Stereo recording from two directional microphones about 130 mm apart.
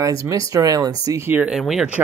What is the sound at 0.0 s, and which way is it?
Speech, 25° right (ahead or behind).